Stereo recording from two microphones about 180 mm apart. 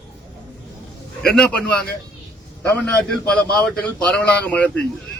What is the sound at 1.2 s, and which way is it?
Speech, 5° left (ahead or behind).